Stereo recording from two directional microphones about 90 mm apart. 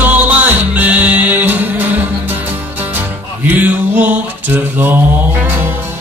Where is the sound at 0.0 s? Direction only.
20° right (ahead or behind).